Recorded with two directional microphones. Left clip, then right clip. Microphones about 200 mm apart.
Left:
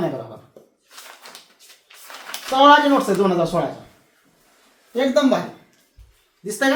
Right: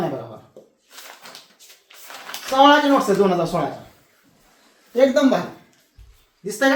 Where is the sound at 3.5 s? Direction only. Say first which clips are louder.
Left 1 dB; 20° left (ahead or behind).